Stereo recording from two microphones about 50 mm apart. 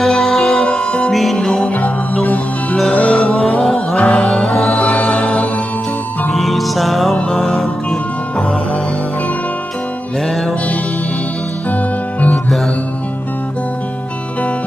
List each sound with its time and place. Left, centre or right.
0.0 s music: centre
0.5 s music: centre
1.1 s music: centre
2.9 s music: left
4.5 s music: centre
4.9 s music: centre
6.3 s music: centre
11.7 s music: left